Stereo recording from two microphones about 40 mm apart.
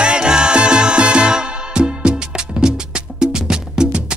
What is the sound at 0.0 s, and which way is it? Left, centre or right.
Music, right.